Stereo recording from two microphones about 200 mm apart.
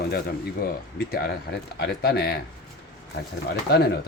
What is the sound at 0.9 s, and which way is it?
Speech, 50° left (ahead or behind).